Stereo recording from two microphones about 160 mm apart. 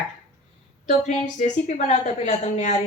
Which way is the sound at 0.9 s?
50° left (ahead or behind).